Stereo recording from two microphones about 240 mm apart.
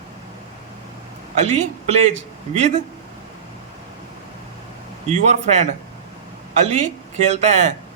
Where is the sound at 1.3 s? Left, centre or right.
Right.